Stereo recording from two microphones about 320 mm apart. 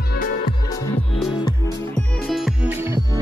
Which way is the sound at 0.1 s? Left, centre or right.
Left.